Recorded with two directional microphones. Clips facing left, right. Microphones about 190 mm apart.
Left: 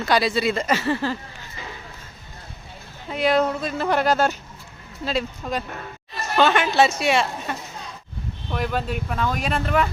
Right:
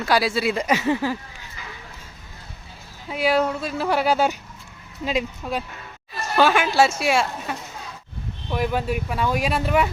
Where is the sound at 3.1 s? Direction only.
5° right (ahead or behind).